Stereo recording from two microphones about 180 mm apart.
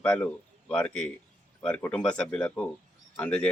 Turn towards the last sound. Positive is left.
turn(degrees=5)  # may be behind; listen again after turning